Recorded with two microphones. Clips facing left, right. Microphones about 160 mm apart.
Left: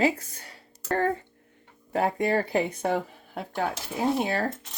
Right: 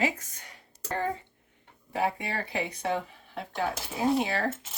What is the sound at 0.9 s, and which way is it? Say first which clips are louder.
Speech: left 5 dB; 55° left (ahead or behind).